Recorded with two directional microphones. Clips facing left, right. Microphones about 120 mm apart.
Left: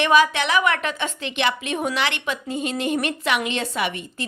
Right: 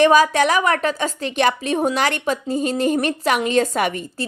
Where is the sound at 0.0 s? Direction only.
40° right (ahead or behind).